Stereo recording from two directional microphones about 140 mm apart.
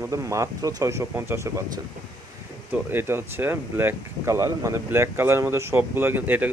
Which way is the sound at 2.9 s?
15° right (ahead or behind).